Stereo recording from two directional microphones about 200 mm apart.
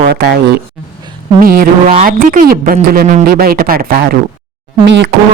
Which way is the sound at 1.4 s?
45° right (ahead or behind).